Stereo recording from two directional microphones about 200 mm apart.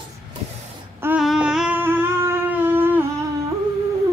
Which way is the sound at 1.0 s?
5° right (ahead or behind).